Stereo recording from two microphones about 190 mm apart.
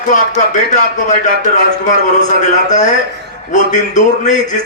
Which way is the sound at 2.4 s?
40° left (ahead or behind).